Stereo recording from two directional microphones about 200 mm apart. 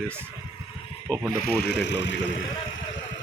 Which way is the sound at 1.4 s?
55° left (ahead or behind).